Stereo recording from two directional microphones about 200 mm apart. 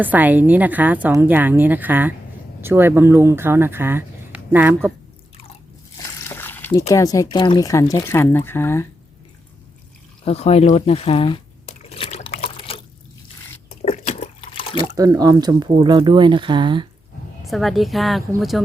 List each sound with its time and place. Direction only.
0.0 s a woman's voice: 10° right (ahead or behind)
6.2 s speech: 10° left (ahead or behind)
10.2 s speech: 30° left (ahead or behind)
11.8 s liquid: 30° left (ahead or behind)
13.7 s water: 35° left (ahead or behind)
14.9 s speech: 15° right (ahead or behind)
17.4 s a woman's voice: centre (ahead or behind)